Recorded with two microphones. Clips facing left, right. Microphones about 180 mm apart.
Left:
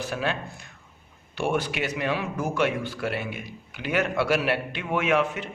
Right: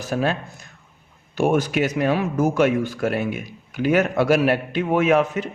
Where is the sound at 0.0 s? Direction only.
40° right (ahead or behind).